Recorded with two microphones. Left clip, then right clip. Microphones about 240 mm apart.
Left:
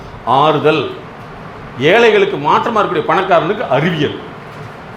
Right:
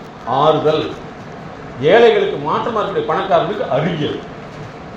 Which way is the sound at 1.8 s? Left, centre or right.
Left.